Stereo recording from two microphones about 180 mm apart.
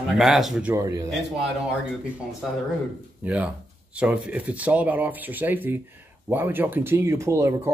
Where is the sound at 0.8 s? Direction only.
20° right (ahead or behind).